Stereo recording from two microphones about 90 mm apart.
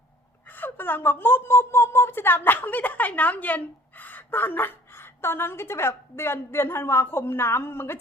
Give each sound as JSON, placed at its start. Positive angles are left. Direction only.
{"t": 0.5, "sound": "a woman's voice", "side_deg": 20}